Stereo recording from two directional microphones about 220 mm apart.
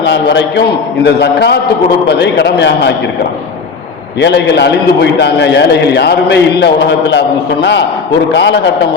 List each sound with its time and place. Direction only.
0.0 s a man's voice: 50° left (ahead or behind)
4.2 s a man's voice: 50° left (ahead or behind)